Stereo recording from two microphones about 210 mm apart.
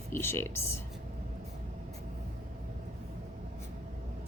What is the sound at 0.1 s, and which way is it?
Speech, 10° left (ahead or behind).